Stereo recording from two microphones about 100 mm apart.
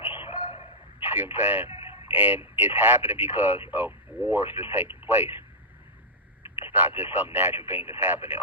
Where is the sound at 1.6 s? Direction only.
70° left (ahead or behind).